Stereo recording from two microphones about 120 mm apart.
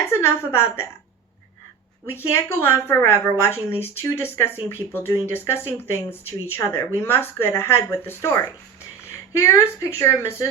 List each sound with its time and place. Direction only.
0.1 s speech: 20° left (ahead or behind)
2.1 s speech: 20° left (ahead or behind)